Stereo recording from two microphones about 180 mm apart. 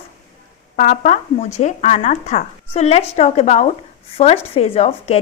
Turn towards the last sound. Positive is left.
turn(degrees=35)  # may be behind; listen again after turning